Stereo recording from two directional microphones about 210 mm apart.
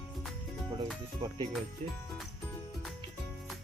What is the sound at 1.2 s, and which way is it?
Speech, 25° right (ahead or behind).